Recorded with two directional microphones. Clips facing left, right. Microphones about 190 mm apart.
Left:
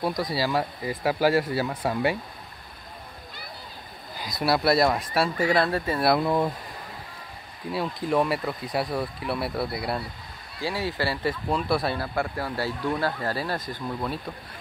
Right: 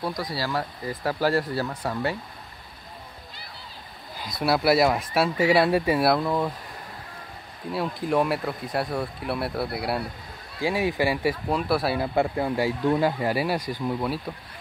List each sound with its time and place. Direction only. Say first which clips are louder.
0.0 s speech: left 3 dB; 15° left (ahead or behind)
4.1 s speech: even; centre (ahead or behind)
6.0 s speech: even; 10° left (ahead or behind)
7.7 s speech: even; centre (ahead or behind)
10.6 s speech: right 4 dB; 15° right (ahead or behind)
11.5 s speech: even; 5° right (ahead or behind)
12.0 s speech: right 5 dB; 20° right (ahead or behind)